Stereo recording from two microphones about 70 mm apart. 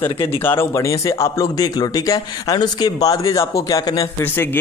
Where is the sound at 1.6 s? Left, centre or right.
Left.